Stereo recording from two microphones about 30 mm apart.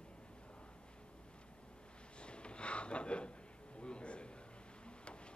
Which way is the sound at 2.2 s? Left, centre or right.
Left.